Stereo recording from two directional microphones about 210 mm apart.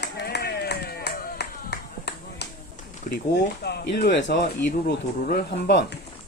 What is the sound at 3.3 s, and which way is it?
Speech, 55° left (ahead or behind).